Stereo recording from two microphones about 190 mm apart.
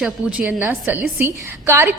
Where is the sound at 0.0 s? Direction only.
5° right (ahead or behind).